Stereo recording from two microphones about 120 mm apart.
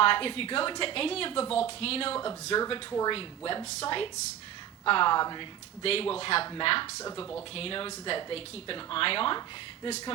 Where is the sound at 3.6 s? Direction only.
60° left (ahead or behind).